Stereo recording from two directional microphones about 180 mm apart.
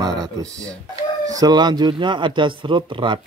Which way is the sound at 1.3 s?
20° right (ahead or behind).